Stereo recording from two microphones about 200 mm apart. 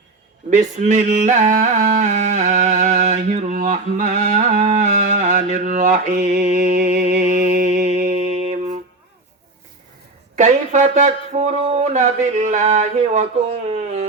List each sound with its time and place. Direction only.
0.5 s music: 35° right (ahead or behind)
10.3 s speech: 35° right (ahead or behind)